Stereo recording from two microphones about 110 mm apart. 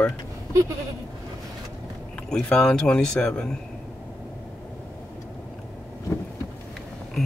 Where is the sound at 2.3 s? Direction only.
5° left (ahead or behind).